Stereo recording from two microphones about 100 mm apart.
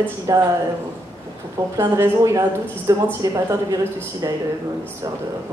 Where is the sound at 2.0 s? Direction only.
30° right (ahead or behind).